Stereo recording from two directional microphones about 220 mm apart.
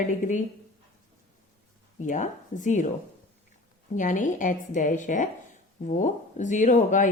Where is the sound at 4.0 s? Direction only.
35° left (ahead or behind).